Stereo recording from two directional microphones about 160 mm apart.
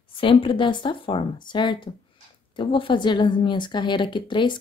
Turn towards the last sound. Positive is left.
turn(degrees=30)  # may be behind; listen again after turning